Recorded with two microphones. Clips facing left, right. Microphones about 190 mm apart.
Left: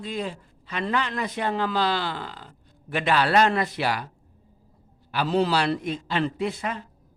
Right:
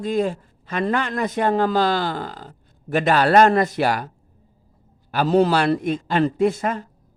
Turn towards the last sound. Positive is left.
turn(degrees=-45)  # may be behind; listen again after turning